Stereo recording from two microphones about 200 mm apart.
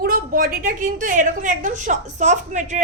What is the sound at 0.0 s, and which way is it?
A woman's voice, 45° right (ahead or behind).